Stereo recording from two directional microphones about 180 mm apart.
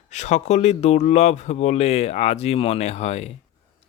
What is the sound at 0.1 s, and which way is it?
Speech, 40° left (ahead or behind).